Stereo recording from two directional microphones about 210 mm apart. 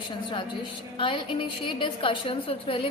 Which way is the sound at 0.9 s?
25° left (ahead or behind).